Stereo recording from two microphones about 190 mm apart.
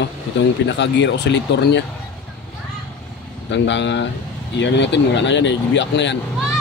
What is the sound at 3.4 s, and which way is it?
Speech, 70° left (ahead or behind).